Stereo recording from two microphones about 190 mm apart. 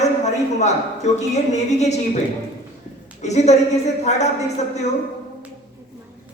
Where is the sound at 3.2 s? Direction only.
35° left (ahead or behind).